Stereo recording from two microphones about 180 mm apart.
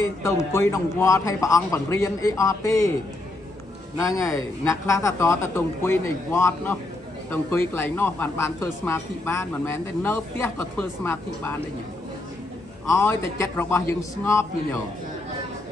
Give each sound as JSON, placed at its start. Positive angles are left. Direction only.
{"t": 0.2, "sound": "speech", "side_deg": 15}
{"t": 4.0, "sound": "speech", "side_deg": 15}
{"t": 12.8, "sound": "speech", "side_deg": 15}